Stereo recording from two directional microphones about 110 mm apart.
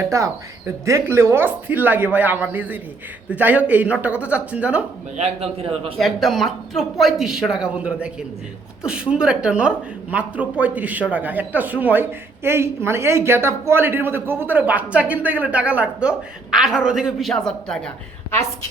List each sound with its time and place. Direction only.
0.1 s speech: 30° right (ahead or behind); by 4.9 s 10° right (ahead or behind)
5.1 s a man's voice: 70° right (ahead or behind)
6.0 s speech: centre (ahead or behind)